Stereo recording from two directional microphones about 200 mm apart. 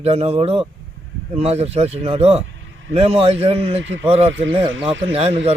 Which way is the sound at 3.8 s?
70° right (ahead or behind).